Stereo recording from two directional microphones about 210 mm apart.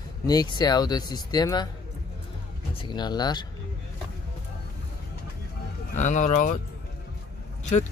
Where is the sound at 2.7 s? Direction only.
20° left (ahead or behind).